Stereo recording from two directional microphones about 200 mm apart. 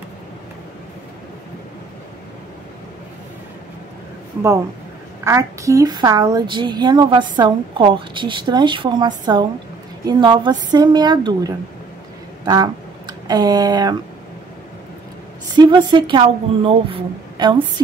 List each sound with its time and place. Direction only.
5.2 s a woman's voice: 15° right (ahead or behind)
13.3 s a woman's voice: 20° right (ahead or behind)
15.4 s a woman's voice: 20° right (ahead or behind)